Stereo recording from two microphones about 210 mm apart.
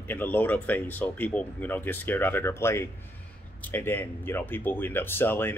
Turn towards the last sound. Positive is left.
turn(degrees=10)  # may be behind; listen again after turning